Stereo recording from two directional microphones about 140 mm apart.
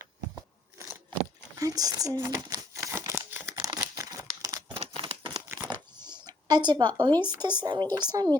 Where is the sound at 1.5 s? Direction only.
25° right (ahead or behind).